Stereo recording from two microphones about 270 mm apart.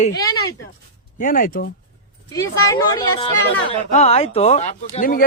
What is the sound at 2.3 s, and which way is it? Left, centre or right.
Speech, centre.